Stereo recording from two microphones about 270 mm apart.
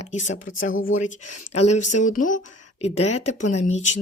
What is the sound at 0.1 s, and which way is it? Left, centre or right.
Speech, left.